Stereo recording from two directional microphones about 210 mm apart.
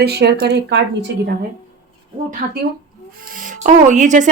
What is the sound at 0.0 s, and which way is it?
Speech, 50° right (ahead or behind).